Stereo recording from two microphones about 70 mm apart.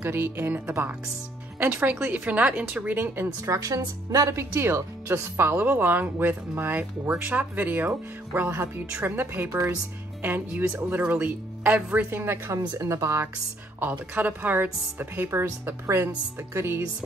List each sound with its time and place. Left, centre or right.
0.0 s speech: right
3.4 s speech: right
11.0 s speech: right
12.1 s speech: right
12.5 s speech: right
13.7 s speech: right